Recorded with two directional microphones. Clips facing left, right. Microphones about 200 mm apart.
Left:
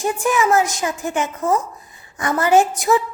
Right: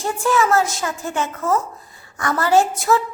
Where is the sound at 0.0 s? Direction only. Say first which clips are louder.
Even; 15° left (ahead or behind).